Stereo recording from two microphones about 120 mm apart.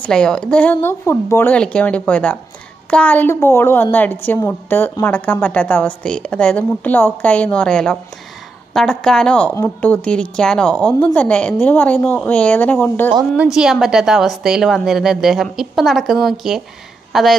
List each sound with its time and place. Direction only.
0.0 s a woman's voice: 5° left (ahead or behind); by 1.5 s 20° left (ahead or behind)
1.5 s a woman's voice: 10° left (ahead or behind)
13.4 s a woman's voice: 5° right (ahead or behind)